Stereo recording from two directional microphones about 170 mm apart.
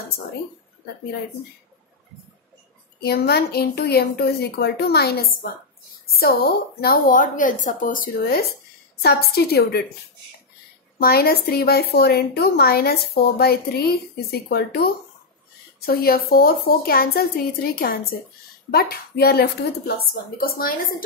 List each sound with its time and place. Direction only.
3.0 s a woman's voice: 70° left (ahead or behind)
6.8 s a woman's voice: 55° left (ahead or behind)
11.0 s a woman's voice: 65° left (ahead or behind)